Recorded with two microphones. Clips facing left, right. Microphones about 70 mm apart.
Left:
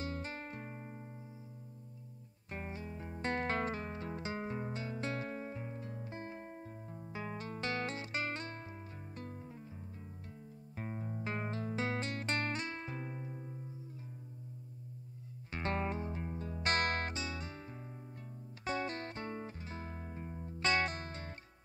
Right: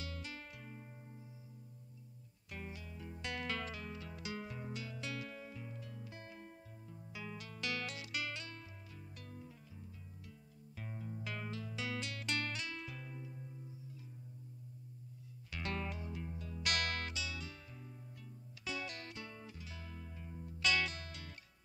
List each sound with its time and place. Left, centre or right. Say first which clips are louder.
0.0 s music: left 7 dB; left
2.5 s music: left 5 dB; left
10.8 s music: left 5 dB; left
15.5 s music: left 6 dB; left
18.6 s music: left 7 dB; left